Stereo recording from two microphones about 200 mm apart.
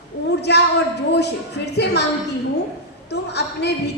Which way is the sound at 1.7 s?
55° left (ahead or behind).